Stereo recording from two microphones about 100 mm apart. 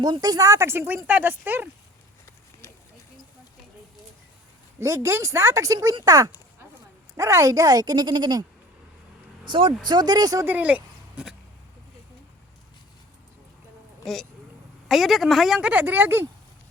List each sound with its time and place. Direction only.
0.0 s speech: 40° right (ahead or behind)
0.7 s speech: 25° right (ahead or behind)
2.6 s a sound: 30° left (ahead or behind)
4.8 s speech: 30° right (ahead or behind)
6.1 s a sound: 35° right (ahead or behind)
7.2 s speech: 30° right (ahead or behind)
9.4 s speech: 55° right (ahead or behind)
9.8 s speech: 45° right (ahead or behind)
10.4 s speech: 15° right (ahead or behind)
14.0 s speech: centre (ahead or behind)
15.7 s speech: 15° right (ahead or behind)